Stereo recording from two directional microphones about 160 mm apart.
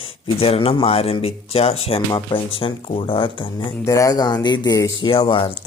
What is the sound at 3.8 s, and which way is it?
Speech, 20° left (ahead or behind).